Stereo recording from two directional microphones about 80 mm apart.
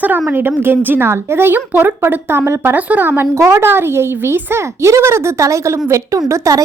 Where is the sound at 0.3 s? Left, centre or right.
Right.